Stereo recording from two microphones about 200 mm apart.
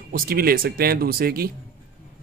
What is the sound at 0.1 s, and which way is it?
Speech, 50° right (ahead or behind).